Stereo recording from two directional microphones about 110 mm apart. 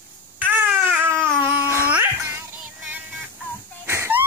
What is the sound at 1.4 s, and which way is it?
Music, 20° right (ahead or behind).